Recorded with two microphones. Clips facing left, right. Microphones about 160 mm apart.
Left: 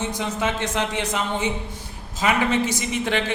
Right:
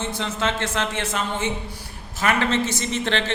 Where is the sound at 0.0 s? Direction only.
15° left (ahead or behind).